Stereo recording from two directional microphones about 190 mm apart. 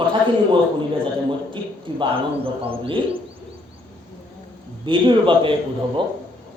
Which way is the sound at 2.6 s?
30° right (ahead or behind).